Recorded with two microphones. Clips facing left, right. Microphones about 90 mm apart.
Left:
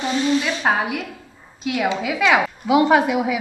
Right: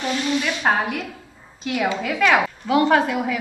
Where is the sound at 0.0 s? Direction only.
20° left (ahead or behind).